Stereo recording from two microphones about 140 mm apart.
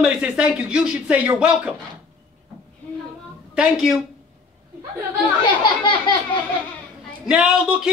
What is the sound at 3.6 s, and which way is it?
Speech, 5° right (ahead or behind).